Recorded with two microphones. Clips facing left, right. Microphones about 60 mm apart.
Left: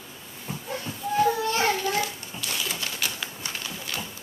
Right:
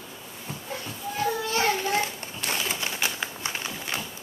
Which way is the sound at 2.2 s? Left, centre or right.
Right.